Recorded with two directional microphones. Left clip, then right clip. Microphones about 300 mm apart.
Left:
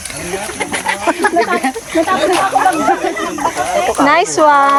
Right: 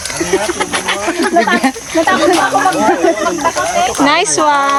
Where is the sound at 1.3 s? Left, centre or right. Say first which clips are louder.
Right 3 dB; right.